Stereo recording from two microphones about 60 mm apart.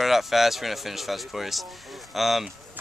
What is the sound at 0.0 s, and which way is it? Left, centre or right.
Speech, centre.